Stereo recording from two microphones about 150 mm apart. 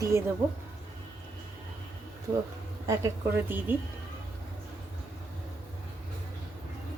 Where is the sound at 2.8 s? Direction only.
20° right (ahead or behind).